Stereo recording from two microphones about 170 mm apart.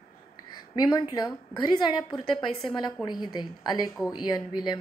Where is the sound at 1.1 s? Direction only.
25° left (ahead or behind).